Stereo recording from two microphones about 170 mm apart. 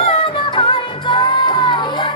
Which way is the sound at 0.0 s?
30° left (ahead or behind).